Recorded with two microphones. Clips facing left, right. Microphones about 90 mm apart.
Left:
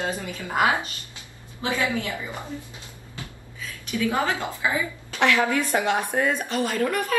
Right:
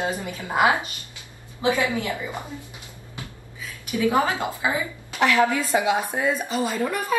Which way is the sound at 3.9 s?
20° right (ahead or behind).